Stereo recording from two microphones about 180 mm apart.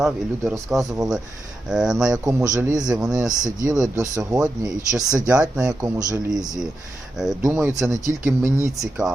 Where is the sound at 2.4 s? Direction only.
20° right (ahead or behind).